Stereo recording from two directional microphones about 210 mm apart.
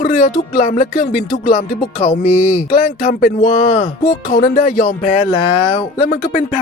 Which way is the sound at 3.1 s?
40° left (ahead or behind).